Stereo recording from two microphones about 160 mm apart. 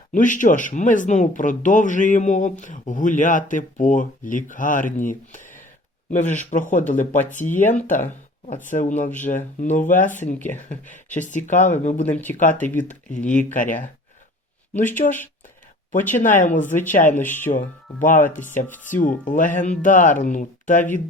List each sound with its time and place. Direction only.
0.1 s speech: 55° left (ahead or behind)
7.4 s speech: 15° left (ahead or behind)
8.4 s speech: 50° left (ahead or behind)
10.3 s speech: 10° left (ahead or behind)
10.8 s speech: 50° left (ahead or behind)
12.0 s speech: 10° left (ahead or behind)
12.4 s speech: 50° left (ahead or behind)
15.0 s speech: 45° left (ahead or behind)
16.4 s speech: 50° left (ahead or behind)
17.2 s speech: 15° left (ahead or behind)
18.0 s speech: 55° left (ahead or behind)